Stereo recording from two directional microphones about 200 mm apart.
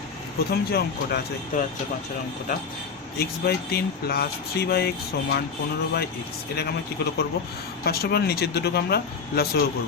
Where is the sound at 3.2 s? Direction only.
50° left (ahead or behind).